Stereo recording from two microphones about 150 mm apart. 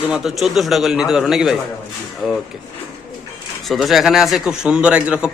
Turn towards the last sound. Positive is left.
turn(degrees=-5)  # may be behind; listen again after turning